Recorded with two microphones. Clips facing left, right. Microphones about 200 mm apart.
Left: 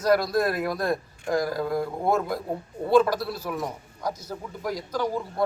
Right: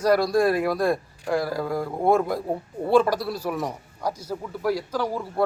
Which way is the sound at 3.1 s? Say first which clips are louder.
Right 3 dB; 10° right (ahead or behind).